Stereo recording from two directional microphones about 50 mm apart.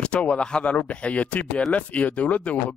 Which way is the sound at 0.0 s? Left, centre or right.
Left.